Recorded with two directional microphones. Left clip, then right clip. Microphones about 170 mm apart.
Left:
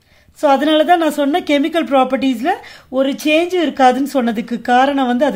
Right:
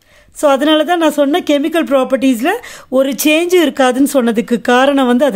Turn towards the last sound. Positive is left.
turn(degrees=-40)  # may be behind; listen again after turning